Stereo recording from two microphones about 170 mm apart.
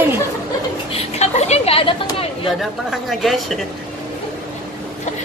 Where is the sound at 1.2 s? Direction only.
40° left (ahead or behind).